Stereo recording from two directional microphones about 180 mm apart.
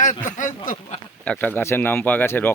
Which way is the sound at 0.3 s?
45° left (ahead or behind).